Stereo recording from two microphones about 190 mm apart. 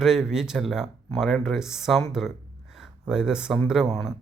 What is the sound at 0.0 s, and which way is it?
Speech, centre (ahead or behind).